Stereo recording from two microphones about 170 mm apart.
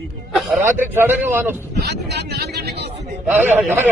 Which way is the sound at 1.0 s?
10° right (ahead or behind).